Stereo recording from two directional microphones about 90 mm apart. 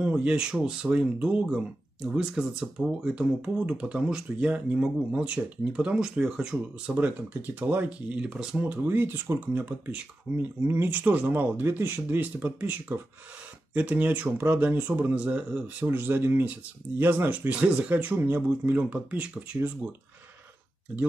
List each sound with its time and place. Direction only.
0.0 s speech: 15° right (ahead or behind)
7.5 s speech: 20° right (ahead or behind)